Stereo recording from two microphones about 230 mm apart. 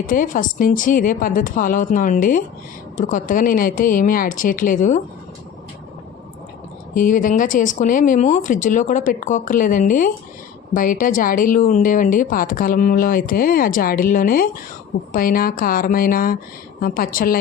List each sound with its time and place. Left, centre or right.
0.1 s speech: left
6.9 s speech: left